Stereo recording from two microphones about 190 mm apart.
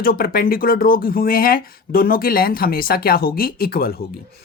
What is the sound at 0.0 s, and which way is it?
Speech, 50° left (ahead or behind).